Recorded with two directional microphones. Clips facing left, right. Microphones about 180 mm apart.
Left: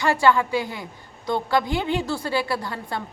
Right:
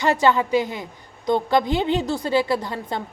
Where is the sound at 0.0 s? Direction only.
20° right (ahead or behind).